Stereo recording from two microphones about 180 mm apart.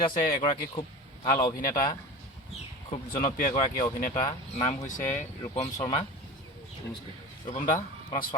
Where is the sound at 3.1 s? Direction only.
45° left (ahead or behind).